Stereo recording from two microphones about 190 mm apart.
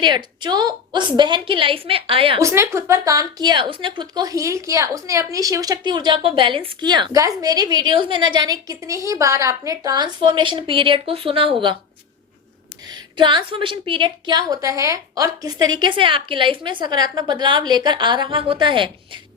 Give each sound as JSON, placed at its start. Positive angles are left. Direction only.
{"t": 0.0, "sound": "a woman's voice", "side_deg": -25}
{"t": 2.4, "sound": "a woman's voice", "side_deg": -15}
{"t": 13.1, "sound": "a woman's voice", "side_deg": -25}